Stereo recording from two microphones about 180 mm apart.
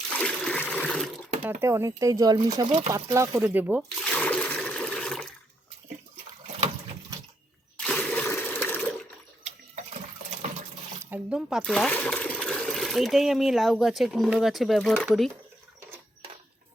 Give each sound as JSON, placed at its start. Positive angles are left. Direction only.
{"t": 0.1, "sound": "splash", "side_deg": 5}
{"t": 1.5, "sound": "speech", "side_deg": -15}
{"t": 4.0, "sound": "toilet flush", "side_deg": 5}
{"t": 7.8, "sound": "a sound", "side_deg": 5}
{"t": 9.4, "sound": "water", "side_deg": -40}
{"t": 11.0, "sound": "speech", "side_deg": -10}